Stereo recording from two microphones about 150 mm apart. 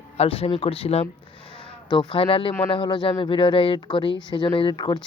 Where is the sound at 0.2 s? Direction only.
40° left (ahead or behind).